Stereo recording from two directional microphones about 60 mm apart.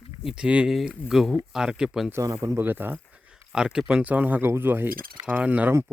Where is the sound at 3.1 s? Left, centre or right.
Centre.